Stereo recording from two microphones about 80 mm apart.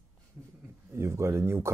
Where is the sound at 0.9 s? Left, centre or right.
Right.